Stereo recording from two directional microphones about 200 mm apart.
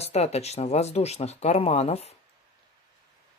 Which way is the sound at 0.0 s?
30° left (ahead or behind).